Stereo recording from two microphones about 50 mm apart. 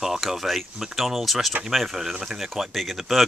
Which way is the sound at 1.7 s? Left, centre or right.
Centre.